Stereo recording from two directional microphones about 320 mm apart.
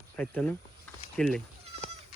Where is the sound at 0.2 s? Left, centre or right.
Centre.